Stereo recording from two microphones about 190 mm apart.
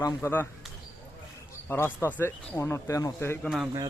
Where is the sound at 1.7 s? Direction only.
10° left (ahead or behind).